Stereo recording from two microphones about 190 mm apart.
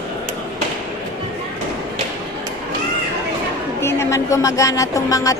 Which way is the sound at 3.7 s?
15° left (ahead or behind).